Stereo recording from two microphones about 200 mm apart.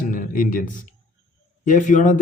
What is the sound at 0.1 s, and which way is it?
A man's voice, 45° left (ahead or behind).